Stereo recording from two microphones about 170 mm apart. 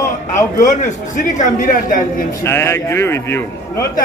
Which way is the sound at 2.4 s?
15° left (ahead or behind).